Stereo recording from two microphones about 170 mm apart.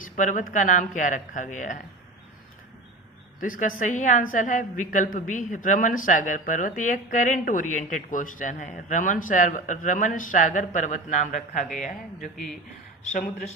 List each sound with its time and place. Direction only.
0.0 s a woman's voice: 50° left (ahead or behind)
3.4 s a woman's voice: 50° left (ahead or behind)